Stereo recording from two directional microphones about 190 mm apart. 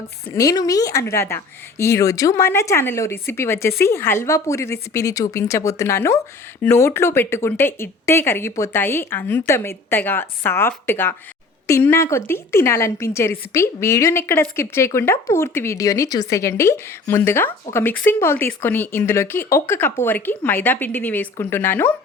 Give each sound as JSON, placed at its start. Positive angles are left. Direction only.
{"t": 0.3, "sound": "speech", "side_deg": 20}